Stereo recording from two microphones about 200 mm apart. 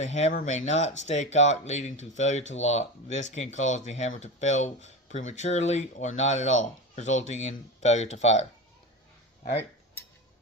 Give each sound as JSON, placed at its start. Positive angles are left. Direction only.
{"t": 0.0, "sound": "speech", "side_deg": 35}